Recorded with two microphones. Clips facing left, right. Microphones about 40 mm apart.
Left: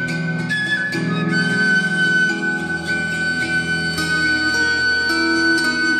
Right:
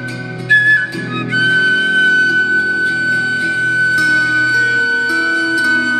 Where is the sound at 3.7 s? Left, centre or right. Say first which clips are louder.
Right 8 dB; right.